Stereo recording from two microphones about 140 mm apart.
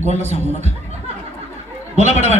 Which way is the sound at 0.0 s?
55° right (ahead or behind).